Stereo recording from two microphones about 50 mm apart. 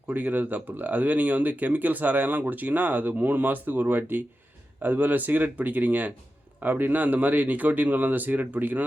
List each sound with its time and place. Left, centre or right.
0.1 s speech: right